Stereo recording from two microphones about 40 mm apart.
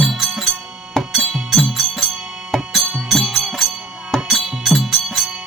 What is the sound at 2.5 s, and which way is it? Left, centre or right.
Music, centre.